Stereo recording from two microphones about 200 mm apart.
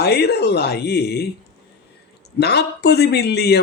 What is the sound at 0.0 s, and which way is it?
Speech, 55° left (ahead or behind).